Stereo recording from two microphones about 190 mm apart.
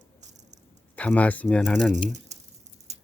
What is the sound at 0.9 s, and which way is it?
Speech, 5° left (ahead or behind).